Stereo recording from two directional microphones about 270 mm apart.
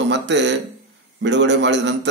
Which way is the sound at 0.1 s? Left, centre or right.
Right.